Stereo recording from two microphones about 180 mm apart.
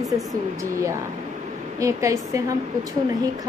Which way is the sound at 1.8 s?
15° right (ahead or behind).